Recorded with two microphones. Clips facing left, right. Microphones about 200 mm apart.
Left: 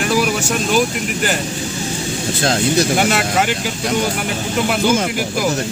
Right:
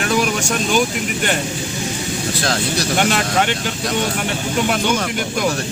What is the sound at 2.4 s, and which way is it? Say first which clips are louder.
Speech: left 7 dB; 25° left (ahead or behind).